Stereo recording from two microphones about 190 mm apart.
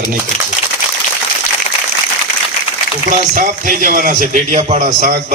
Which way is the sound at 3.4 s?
45° right (ahead or behind).